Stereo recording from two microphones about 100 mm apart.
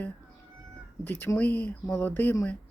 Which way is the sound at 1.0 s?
20° left (ahead or behind).